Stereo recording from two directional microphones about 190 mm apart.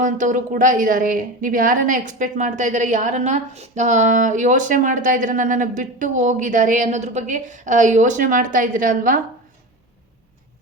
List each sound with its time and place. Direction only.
0.0 s a woman's voice: 40° right (ahead or behind)